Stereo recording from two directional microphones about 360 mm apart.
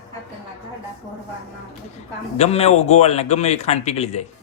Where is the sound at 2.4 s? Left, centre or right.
Centre.